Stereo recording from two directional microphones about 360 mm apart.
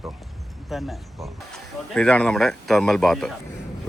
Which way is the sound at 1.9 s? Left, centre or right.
Centre.